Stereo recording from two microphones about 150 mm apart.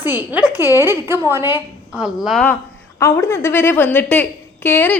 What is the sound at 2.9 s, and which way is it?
A woman's voice, 20° left (ahead or behind).